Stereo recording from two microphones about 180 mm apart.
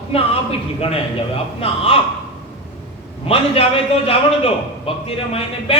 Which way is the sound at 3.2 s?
35° left (ahead or behind).